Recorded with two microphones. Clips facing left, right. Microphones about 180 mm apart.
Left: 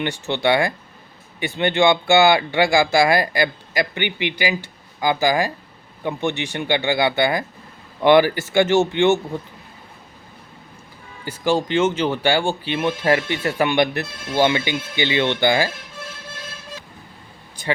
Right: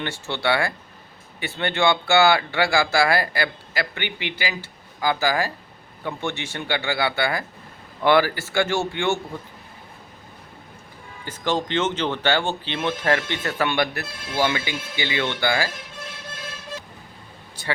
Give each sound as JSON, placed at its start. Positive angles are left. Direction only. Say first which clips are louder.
{"t": 0.0, "sound": "speech", "louder": "left 5 dB", "side_deg": 20}
{"t": 11.3, "sound": "speech", "louder": "left 4 dB", "side_deg": 10}